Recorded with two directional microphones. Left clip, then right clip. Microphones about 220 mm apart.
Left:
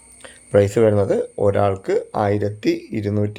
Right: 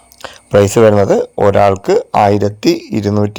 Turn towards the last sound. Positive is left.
turn(degrees=-30)  # may be behind; listen again after turning